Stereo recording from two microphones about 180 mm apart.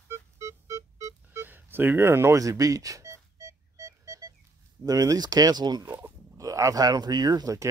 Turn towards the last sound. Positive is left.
turn(degrees=-20)  # may be behind; listen again after turning